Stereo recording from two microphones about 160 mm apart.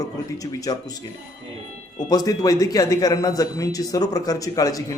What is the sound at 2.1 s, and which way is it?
A man's voice, 20° left (ahead or behind).